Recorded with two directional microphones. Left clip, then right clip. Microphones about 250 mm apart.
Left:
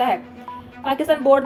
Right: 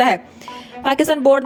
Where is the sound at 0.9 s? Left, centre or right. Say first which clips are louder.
Right 2 dB; right.